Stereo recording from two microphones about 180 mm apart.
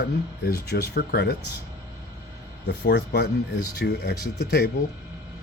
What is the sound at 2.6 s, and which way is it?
Speech, 70° left (ahead or behind).